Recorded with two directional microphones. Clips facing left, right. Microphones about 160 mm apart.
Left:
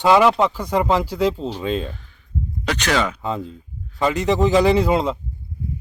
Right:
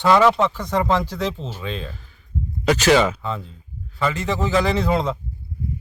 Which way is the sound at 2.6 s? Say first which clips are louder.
Right 5 dB; 5° right (ahead or behind).